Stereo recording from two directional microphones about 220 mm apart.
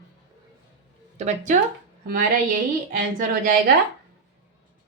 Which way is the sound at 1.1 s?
30° right (ahead or behind).